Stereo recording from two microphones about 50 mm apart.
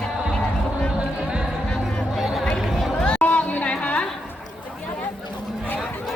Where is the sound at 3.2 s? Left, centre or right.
Left.